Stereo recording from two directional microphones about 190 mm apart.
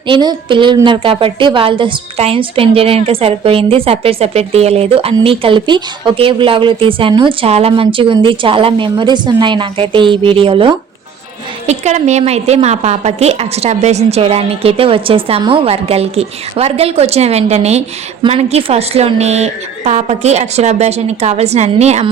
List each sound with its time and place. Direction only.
0.1 s a woman's voice: 25° right (ahead or behind)